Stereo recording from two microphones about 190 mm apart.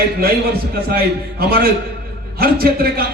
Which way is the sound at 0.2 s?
55° right (ahead or behind).